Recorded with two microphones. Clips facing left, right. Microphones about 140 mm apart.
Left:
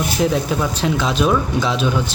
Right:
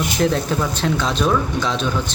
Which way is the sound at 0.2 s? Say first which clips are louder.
Left 1 dB; 5° left (ahead or behind).